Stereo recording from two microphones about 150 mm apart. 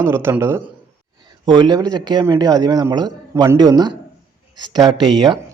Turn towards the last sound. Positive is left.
turn(degrees=-30)  # may be behind; listen again after turning